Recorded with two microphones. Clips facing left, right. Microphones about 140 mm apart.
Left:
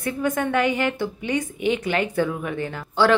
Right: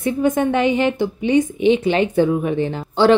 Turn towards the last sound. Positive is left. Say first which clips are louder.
# right 5 dB
turn(degrees=-25)  # may be behind; listen again after turning